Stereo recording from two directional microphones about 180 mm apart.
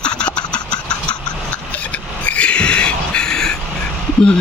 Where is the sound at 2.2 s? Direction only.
5° left (ahead or behind).